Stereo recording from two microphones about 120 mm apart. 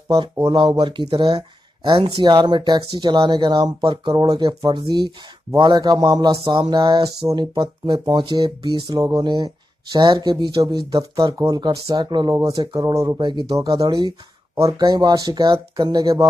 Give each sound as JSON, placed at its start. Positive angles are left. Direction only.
{"t": 0.5, "sound": "speech", "side_deg": -45}
{"t": 1.8, "sound": "speech", "side_deg": -50}
{"t": 2.3, "sound": "speech", "side_deg": -35}
{"t": 13.2, "sound": "speech", "side_deg": -40}
{"t": 13.6, "sound": "speech", "side_deg": -30}